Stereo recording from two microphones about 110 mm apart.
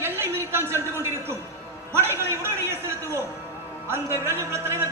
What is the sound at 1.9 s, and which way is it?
Music, 20° right (ahead or behind).